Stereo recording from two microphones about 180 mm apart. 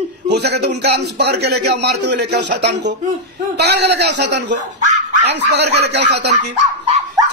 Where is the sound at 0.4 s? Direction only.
65° right (ahead or behind).